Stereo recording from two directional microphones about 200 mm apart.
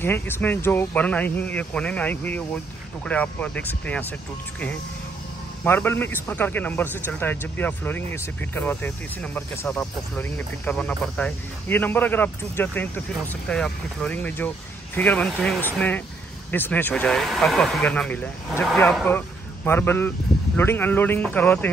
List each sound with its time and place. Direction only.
0.0 s a man's voice: 10° left (ahead or behind)
5.6 s a man's voice: 10° left (ahead or behind)